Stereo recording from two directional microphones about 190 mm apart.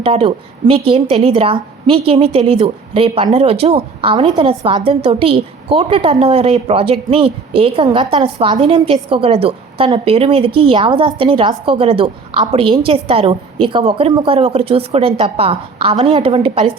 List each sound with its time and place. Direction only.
0.0 s a woman's voice: 30° right (ahead or behind)